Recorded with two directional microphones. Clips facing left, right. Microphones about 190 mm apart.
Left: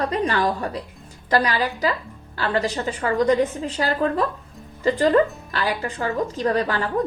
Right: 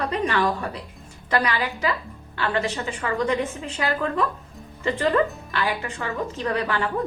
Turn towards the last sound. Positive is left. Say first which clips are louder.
# left 3 dB
turn(degrees=35)  # may be behind; listen again after turning